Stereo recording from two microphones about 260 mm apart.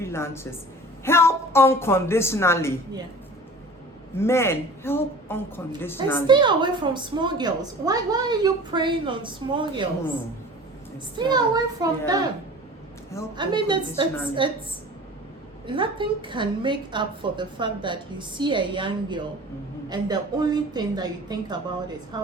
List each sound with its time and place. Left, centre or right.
0.0 s a woman's voice: centre
4.2 s a woman's voice: centre
6.2 s a woman's voice: centre
11.2 s a woman's voice: centre
13.3 s a woman's voice: centre
15.6 s a woman's voice: centre